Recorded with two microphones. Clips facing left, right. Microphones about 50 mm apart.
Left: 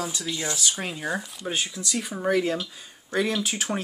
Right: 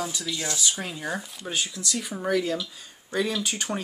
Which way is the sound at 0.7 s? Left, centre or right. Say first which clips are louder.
Left 2 dB; centre.